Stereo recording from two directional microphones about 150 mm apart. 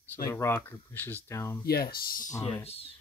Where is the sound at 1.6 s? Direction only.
85° left.